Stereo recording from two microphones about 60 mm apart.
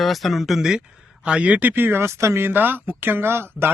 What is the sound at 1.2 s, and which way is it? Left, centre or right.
Speech, centre.